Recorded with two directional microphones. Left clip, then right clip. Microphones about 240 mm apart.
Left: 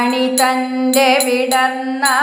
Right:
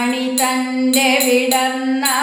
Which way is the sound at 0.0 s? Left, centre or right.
Centre.